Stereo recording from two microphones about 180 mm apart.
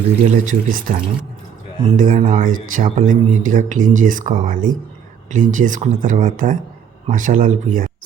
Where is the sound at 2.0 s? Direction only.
45° right (ahead or behind).